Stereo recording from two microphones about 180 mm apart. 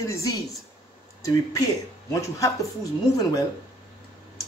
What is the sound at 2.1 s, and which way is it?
Speech, 15° left (ahead or behind).